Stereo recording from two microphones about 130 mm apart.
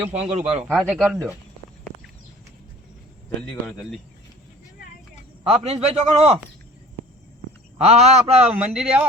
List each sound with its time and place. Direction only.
0.1 s a man's voice: 60° right (ahead or behind)
0.7 s speech: centre (ahead or behind)
3.5 s speech: centre (ahead or behind)
5.5 s a man's voice: 50° right (ahead or behind)
7.9 s a man's voice: 55° right (ahead or behind)
8.7 s speech: 5° right (ahead or behind)